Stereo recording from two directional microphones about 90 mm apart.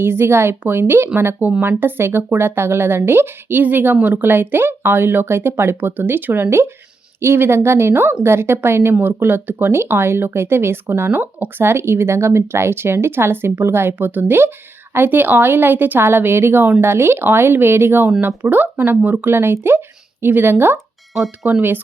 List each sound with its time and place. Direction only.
0.0 s speech: 25° right (ahead or behind)
21.1 s speech: centre (ahead or behind)
21.4 s speech: 20° right (ahead or behind)